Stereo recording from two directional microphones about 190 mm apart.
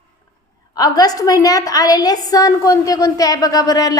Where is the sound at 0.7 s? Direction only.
20° left (ahead or behind).